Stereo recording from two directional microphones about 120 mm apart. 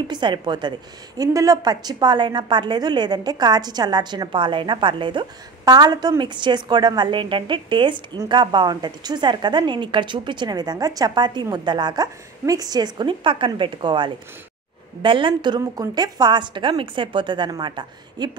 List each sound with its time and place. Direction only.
0.1 s a woman's voice: 40° right (ahead or behind)